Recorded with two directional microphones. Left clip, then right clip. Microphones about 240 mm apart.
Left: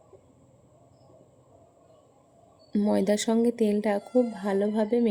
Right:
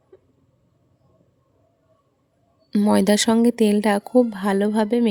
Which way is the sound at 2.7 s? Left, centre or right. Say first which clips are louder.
Right 6 dB; right.